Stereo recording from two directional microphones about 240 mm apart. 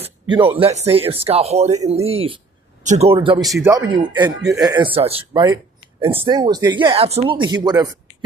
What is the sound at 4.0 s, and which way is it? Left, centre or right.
Speech, centre.